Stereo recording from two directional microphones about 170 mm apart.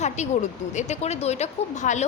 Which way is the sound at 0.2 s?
45° left (ahead or behind).